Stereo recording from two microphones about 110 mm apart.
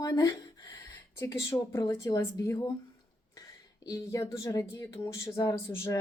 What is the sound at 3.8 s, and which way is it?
Speech, 30° left (ahead or behind).